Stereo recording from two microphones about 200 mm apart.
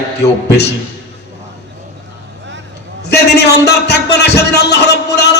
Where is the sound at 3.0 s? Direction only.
55° left (ahead or behind).